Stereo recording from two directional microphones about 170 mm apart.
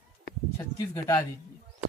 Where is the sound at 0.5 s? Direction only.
15° left (ahead or behind).